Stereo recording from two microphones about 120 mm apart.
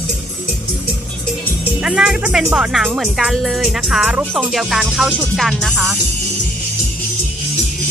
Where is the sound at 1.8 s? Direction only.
5° right (ahead or behind).